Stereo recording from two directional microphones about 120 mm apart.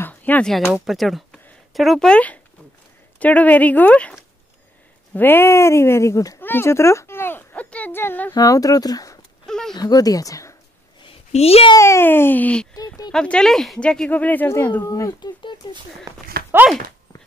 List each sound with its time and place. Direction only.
0.0 s a sound: 15° left (ahead or behind)
0.8 s speech: centre (ahead or behind)
5.1 s speech: 15° left (ahead or behind)
6.4 s a sound: 20° left (ahead or behind)
8.4 s speech: 30° left (ahead or behind)
9.5 s a sound: 5° left (ahead or behind)
9.8 s speech: 30° left (ahead or behind)
11.3 s a child's voice: 55° left (ahead or behind)
11.7 s speech: 25° left (ahead or behind)
12.7 s a sound: 30° left (ahead or behind)
13.1 s speech: 5° left (ahead or behind)
14.9 s speech: 30° left (ahead or behind)
16.5 s speech: 20° right (ahead or behind)